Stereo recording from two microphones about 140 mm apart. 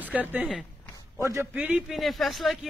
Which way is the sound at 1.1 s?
20° right (ahead or behind).